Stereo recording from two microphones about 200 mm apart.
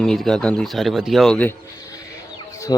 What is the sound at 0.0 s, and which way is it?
A man's voice, centre (ahead or behind).